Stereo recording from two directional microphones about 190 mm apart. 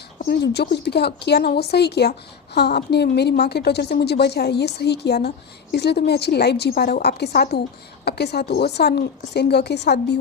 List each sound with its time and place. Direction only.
0.2 s speech: 60° left (ahead or behind)